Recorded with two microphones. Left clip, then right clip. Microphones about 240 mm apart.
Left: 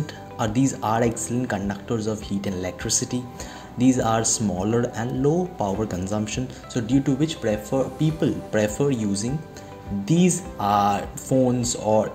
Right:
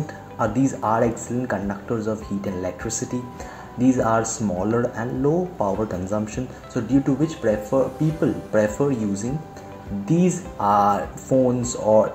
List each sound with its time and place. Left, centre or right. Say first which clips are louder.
0.6 s speech: right 1 dB; left